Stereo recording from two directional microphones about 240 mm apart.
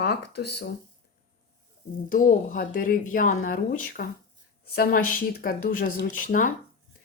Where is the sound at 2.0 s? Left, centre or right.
Left.